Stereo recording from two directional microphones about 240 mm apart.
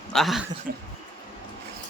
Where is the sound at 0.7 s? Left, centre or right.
Right.